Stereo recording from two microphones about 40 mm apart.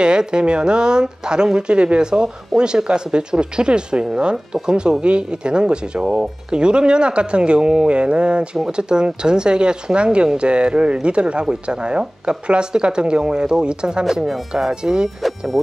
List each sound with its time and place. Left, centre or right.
0.0 s speech: right
14.0 s speech: centre
14.7 s speech: right
15.2 s speech: centre